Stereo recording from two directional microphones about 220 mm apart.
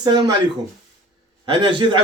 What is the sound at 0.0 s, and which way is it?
Speech, 20° right (ahead or behind).